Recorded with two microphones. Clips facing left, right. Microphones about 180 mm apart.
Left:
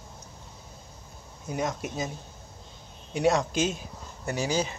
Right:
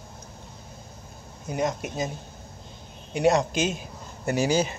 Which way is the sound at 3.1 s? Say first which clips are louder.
Right 3 dB; 70° right (ahead or behind).